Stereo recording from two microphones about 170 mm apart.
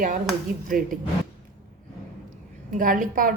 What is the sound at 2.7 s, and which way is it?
Speech, 55° right (ahead or behind).